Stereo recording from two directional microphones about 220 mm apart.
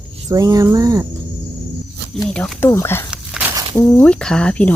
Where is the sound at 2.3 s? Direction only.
5° left (ahead or behind).